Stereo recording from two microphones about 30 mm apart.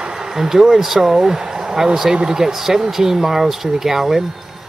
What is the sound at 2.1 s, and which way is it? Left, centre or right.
Speech, right.